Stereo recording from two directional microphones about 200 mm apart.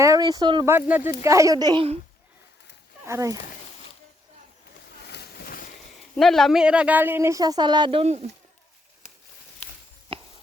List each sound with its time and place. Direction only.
0.0 s speech: 20° right (ahead or behind)
0.7 s speech: 10° right (ahead or behind)
3.1 s speech: 15° right (ahead or behind)
5.0 s a sound: 55° left (ahead or behind)
6.1 s speech: centre (ahead or behind); by 8.3 s 30° right (ahead or behind)
10.1 s a sound: 30° right (ahead or behind)